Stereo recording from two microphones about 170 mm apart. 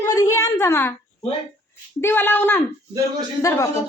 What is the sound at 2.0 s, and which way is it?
A woman's voice, 10° left (ahead or behind).